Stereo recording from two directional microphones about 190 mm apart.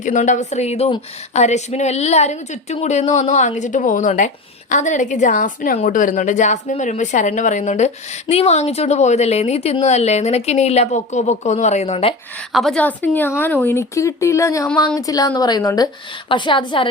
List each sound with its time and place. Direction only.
0.0 s speech: 40° left (ahead or behind)
12.5 s a woman's voice: 5° left (ahead or behind); by 16.9 s 25° left (ahead or behind)